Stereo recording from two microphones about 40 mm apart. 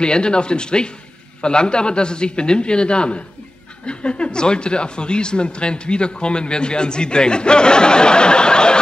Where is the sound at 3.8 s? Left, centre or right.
Left.